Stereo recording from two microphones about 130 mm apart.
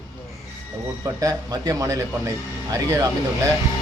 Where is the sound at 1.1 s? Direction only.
30° right (ahead or behind).